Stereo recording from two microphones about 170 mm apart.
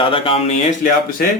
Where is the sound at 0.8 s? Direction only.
55° left (ahead or behind).